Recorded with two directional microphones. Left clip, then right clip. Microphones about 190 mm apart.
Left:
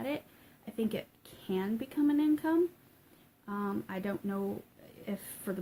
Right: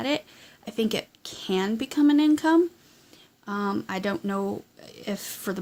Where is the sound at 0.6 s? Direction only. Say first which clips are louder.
Right 9 dB; 50° right (ahead or behind).